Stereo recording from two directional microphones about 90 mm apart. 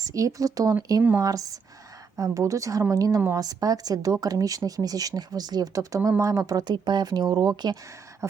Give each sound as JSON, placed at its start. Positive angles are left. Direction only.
{"t": 0.0, "sound": "speech", "side_deg": -40}
{"t": 6.5, "sound": "speech", "side_deg": -50}
{"t": 8.2, "sound": "speech", "side_deg": -35}